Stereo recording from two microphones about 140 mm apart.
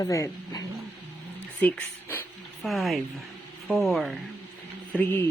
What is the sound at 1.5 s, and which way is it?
Speech, 10° left (ahead or behind).